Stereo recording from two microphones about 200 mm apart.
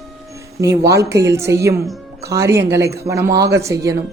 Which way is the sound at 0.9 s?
15° right (ahead or behind).